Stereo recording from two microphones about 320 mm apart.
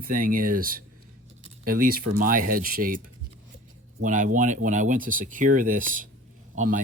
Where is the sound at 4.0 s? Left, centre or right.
Right.